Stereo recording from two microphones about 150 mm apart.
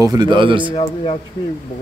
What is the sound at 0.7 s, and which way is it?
Speech, 40° left (ahead or behind).